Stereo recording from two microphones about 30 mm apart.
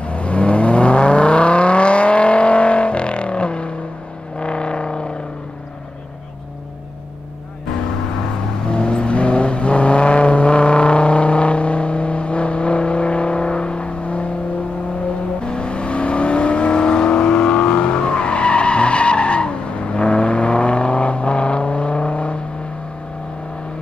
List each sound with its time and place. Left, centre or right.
0.0 s a sound: left
8.6 s vehicle: left
15.4 s vehicle: left